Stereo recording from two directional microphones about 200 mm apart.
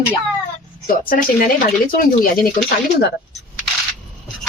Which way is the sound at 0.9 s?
45° left (ahead or behind).